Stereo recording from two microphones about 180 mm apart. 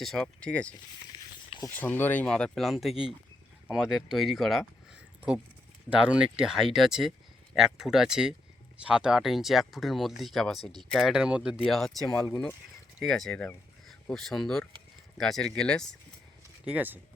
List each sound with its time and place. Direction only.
0.0 s speech: 5° left (ahead or behind)
1.5 s a sound: 25° left (ahead or behind)
1.7 s speech: 10° left (ahead or behind)
5.9 s speech: 5° right (ahead or behind)
16.6 s speech: 10° right (ahead or behind)